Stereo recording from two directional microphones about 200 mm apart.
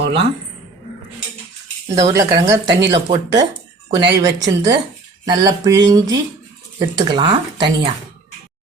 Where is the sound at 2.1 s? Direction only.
20° right (ahead or behind).